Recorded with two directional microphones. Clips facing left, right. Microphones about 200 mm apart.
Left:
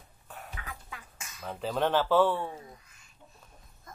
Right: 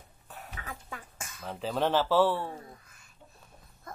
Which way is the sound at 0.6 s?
40° right (ahead or behind).